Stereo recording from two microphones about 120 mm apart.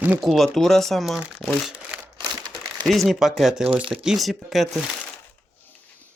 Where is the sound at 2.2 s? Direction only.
35° right (ahead or behind).